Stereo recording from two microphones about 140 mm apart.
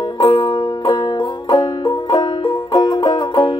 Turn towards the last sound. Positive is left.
turn(degrees=30)  # may be behind; listen again after turning